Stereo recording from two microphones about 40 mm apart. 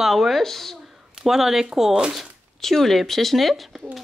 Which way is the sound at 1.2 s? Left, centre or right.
Centre.